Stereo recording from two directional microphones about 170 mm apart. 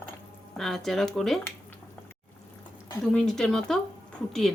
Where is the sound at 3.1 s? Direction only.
5° left (ahead or behind).